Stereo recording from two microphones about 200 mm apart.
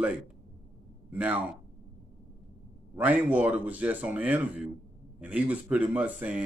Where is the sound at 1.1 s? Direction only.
10° right (ahead or behind).